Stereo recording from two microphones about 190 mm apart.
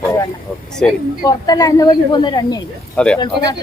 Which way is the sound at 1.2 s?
20° left (ahead or behind).